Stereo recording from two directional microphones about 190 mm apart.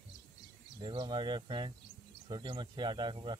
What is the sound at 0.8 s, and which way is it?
Speech, 25° right (ahead or behind).